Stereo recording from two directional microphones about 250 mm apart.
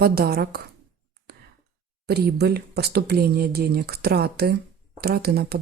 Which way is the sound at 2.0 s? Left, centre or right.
Right.